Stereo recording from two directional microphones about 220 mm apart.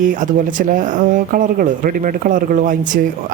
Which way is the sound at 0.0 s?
35° right (ahead or behind).